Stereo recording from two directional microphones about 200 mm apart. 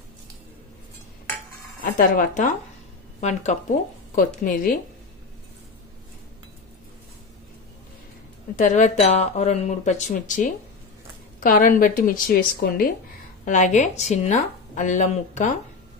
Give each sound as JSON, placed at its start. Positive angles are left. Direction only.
{"t": 1.8, "sound": "a woman's voice", "side_deg": 45}
{"t": 8.5, "sound": "a woman's voice", "side_deg": 40}